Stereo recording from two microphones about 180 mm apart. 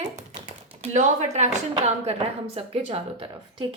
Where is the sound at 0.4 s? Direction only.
40° right (ahead or behind).